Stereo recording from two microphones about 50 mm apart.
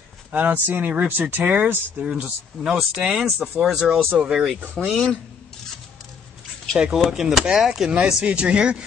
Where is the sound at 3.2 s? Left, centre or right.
Centre.